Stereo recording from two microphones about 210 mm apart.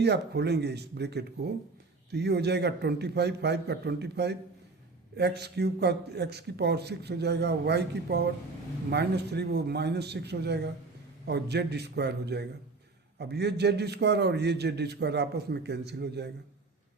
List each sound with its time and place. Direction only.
0.0 s a man's voice: 55° right (ahead or behind)